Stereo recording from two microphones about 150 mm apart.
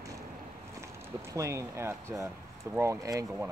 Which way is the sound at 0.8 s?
20° right (ahead or behind).